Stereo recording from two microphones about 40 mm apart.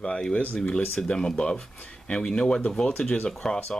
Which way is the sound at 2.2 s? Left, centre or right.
Centre.